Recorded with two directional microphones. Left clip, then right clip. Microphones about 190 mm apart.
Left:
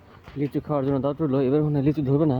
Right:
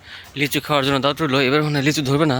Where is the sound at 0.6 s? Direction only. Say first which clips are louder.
Right 6 dB; 40° right (ahead or behind).